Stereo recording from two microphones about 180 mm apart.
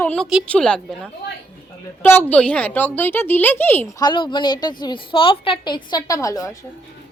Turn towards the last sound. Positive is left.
turn(degrees=20)  # may be behind; listen again after turning